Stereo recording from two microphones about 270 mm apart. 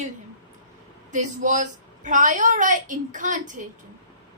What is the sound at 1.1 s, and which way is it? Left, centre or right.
A woman's voice, right.